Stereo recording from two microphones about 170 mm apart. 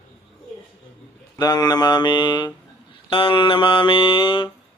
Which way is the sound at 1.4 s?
25° left (ahead or behind).